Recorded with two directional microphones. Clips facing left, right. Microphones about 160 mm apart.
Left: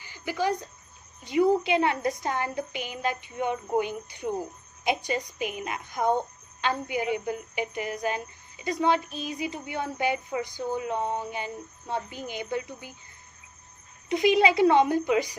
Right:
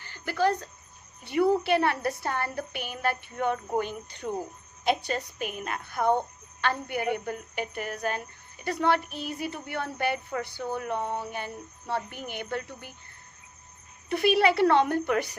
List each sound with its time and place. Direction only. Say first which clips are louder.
0.0 s a woman's voice: right 2 dB; 10° left (ahead or behind)
6.8 s a woman's voice: left 1 dB; 55° right (ahead or behind)
7.3 s a woman's voice: left 2 dB; 15° left (ahead or behind)
9.0 s a woman's voice: left 1 dB; 60° right (ahead or behind)
9.3 s a woman's voice: left 1 dB; 15° left (ahead or behind)
14.1 s a woman's voice: left 1 dB; 15° left (ahead or behind)